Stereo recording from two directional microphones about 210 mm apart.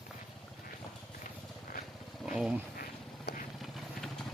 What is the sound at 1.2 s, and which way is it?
Vehicle, 45° left (ahead or behind).